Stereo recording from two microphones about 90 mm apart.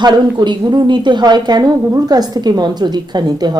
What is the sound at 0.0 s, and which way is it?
A woman's voice, 55° right (ahead or behind).